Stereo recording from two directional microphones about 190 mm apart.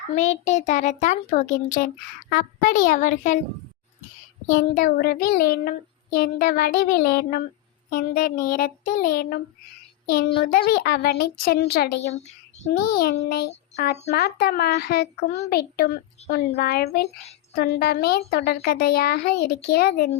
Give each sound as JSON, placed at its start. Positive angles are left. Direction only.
{"t": 0.2, "sound": "a child's voice", "side_deg": 40}
{"t": 2.3, "sound": "child singing", "side_deg": 45}
{"t": 4.5, "sound": "child singing", "side_deg": 50}
{"t": 10.1, "sound": "a child's voice", "side_deg": 55}
{"t": 16.2, "sound": "a child's voice", "side_deg": 35}
{"t": 16.6, "sound": "a child's voice", "side_deg": 55}
{"t": 17.5, "sound": "child singing", "side_deg": 55}
{"t": 18.3, "sound": "a child's voice", "side_deg": 55}
{"t": 19.6, "sound": "child singing", "side_deg": 55}